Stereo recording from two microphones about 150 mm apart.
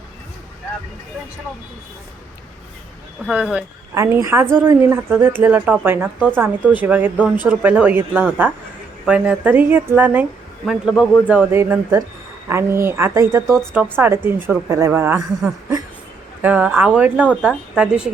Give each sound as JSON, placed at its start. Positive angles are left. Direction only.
{"t": 3.2, "sound": "speech", "side_deg": -5}
{"t": 3.9, "sound": "a man's voice", "side_deg": -20}
{"t": 11.3, "sound": "speech", "side_deg": -15}
{"t": 17.2, "sound": "a man's voice", "side_deg": 5}
{"t": 17.7, "sound": "speech", "side_deg": -5}